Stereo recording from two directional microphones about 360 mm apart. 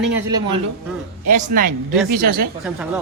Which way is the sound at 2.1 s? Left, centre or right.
Right.